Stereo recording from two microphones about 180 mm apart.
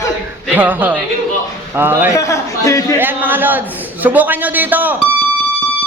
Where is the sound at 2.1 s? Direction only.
15° left (ahead or behind).